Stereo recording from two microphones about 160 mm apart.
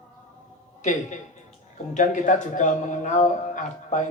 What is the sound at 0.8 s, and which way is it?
Speech, 50° left (ahead or behind).